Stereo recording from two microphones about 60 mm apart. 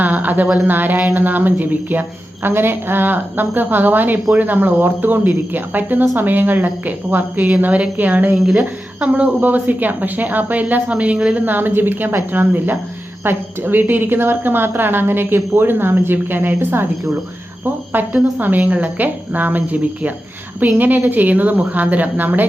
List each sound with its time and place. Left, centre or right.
0.0 s a sound: right
0.7 s a woman's voice: right
8.4 s speech: centre
8.6 s a woman's voice: right
11.4 s a woman's voice: right
17.9 s a woman's voice: right